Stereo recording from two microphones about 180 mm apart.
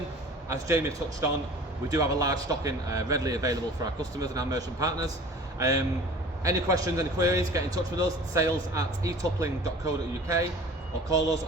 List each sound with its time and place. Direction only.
0.4 s a man's voice: 15° right (ahead or behind)